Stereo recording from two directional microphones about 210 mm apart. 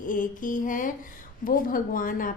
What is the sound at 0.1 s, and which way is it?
A woman's voice, 40° left (ahead or behind).